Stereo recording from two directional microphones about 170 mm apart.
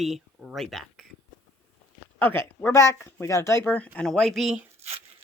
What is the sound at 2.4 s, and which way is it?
Speech, 15° left (ahead or behind).